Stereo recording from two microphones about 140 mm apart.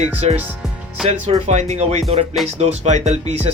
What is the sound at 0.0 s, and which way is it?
Speech, 50° right (ahead or behind).